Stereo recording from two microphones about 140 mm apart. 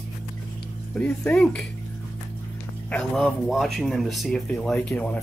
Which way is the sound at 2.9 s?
Centre (ahead or behind).